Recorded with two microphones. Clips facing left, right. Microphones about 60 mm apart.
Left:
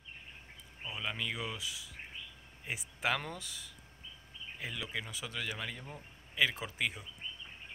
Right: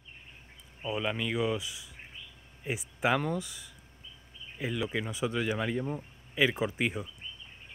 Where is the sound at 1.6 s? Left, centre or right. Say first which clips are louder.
Even; right.